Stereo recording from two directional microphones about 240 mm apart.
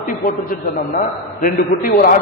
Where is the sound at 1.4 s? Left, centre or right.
Left.